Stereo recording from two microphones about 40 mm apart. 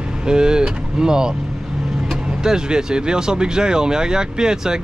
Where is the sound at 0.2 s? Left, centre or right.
Centre.